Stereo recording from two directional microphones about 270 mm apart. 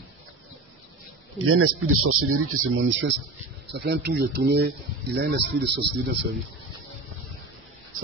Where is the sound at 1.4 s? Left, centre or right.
Right.